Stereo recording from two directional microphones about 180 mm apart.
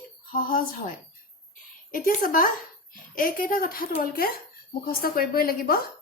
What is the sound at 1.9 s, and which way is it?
A woman's voice, 50° left (ahead or behind).